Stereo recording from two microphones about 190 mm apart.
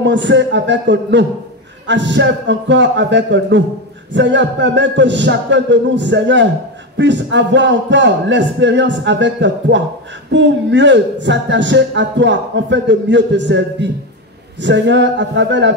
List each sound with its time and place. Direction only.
0.0 s a man's voice: 70° right (ahead or behind)